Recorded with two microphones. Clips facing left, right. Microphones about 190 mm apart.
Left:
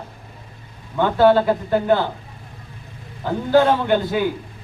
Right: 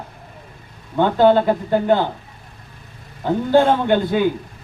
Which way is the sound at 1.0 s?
20° right (ahead or behind).